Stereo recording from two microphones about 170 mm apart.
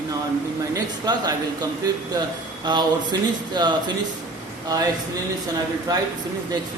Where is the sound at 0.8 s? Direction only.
20° right (ahead or behind).